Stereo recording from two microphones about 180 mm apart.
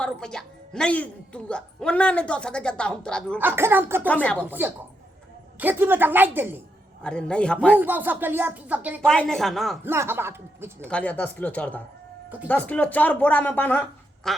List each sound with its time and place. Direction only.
0.0 s a woman's voice: 5° left (ahead or behind)
3.3 s speech: 10° right (ahead or behind)
4.0 s speech: 10° left (ahead or behind)
4.4 s speech: 10° right (ahead or behind)
7.0 s a woman's voice: 5° left (ahead or behind)
7.8 s speech: 10° right (ahead or behind)
9.0 s a woman's voice: 5° left (ahead or behind)
9.8 s speech: 15° right (ahead or behind)
10.8 s a woman's voice: 5° left (ahead or behind)